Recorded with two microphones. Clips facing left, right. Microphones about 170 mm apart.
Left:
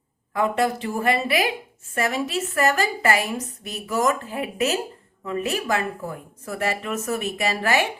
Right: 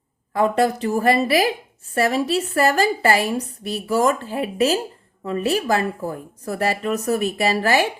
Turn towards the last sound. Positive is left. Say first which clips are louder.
# right 4 dB
turn(degrees=-35)  # may be behind; listen again after turning